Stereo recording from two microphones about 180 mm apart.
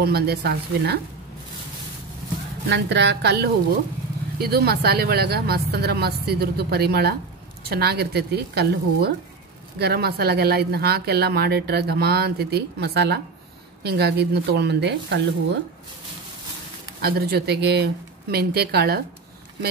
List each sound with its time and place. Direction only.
0.0 s speech: 65° right (ahead or behind)
2.7 s speech: 70° right (ahead or behind)
17.0 s speech: 65° right (ahead or behind)